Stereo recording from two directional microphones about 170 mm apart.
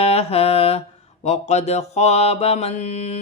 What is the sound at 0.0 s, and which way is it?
Mantra, 35° left (ahead or behind).